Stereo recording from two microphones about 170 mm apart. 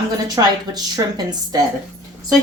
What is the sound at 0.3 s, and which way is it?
Speech, 25° right (ahead or behind).